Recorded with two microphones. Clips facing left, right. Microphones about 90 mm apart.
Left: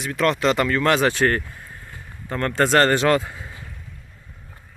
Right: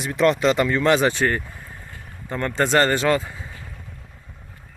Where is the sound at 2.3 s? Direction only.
5° right (ahead or behind).